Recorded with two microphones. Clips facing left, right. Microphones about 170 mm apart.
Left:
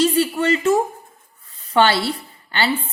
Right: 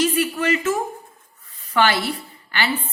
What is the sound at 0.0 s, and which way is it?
A woman's voice, 30° left (ahead or behind).